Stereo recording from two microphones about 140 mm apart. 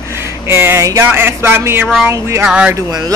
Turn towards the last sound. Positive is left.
turn(degrees=-25)  # may be behind; listen again after turning